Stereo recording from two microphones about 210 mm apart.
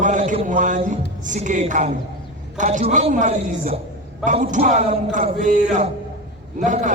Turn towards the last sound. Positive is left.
turn(degrees=-35)  # may be behind; listen again after turning